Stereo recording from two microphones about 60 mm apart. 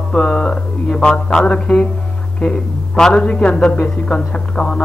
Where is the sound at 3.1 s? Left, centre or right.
Centre.